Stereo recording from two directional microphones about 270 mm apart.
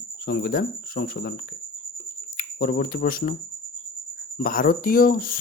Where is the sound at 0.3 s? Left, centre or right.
Left.